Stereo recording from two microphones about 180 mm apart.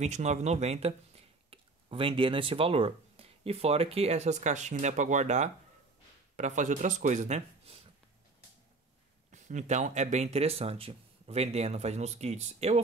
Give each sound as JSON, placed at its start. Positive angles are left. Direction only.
{"t": 0.0, "sound": "speech", "side_deg": -40}
{"t": 9.3, "sound": "speech", "side_deg": -40}